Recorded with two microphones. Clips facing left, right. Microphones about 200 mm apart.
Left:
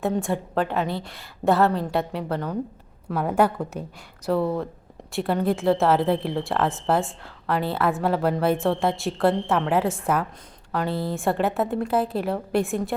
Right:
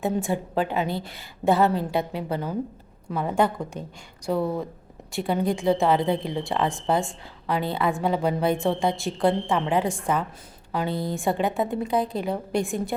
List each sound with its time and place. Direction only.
0.0 s a woman's voice: centre (ahead or behind)